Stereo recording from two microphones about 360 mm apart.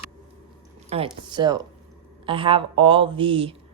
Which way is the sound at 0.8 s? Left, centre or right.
Centre.